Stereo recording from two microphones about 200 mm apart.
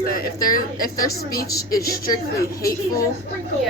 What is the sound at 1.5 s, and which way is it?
Speech, 15° left (ahead or behind).